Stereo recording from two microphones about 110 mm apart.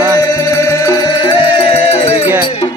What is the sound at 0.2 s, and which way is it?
Music, 40° left (ahead or behind).